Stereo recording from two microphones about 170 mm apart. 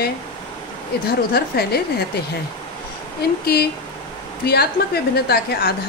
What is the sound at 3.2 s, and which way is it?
Speech, 65° left (ahead or behind).